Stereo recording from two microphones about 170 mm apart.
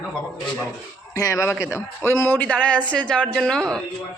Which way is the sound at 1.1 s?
20° left (ahead or behind).